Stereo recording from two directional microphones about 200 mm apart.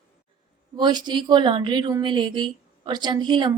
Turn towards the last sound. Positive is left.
turn(degrees=-20)  # may be behind; listen again after turning